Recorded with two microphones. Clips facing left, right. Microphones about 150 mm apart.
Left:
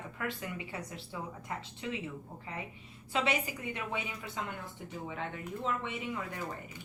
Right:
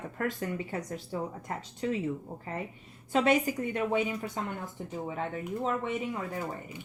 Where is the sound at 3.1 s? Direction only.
45° right (ahead or behind).